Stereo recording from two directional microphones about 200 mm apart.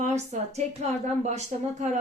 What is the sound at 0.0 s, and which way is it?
A woman's voice, 35° right (ahead or behind).